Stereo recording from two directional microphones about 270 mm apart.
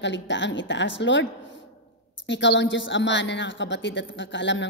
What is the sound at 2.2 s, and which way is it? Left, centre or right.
A woman's voice, left.